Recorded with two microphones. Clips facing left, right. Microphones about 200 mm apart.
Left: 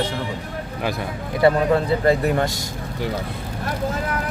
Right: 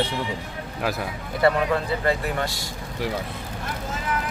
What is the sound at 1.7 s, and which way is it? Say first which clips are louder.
Speech: left 6 dB; 40° left (ahead or behind).